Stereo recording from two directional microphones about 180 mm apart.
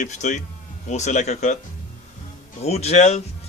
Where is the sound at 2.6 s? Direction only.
35° left (ahead or behind).